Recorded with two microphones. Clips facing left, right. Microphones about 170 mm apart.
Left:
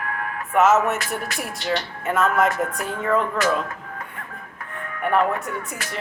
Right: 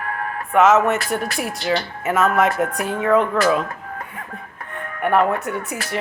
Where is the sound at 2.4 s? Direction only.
65° right (ahead or behind).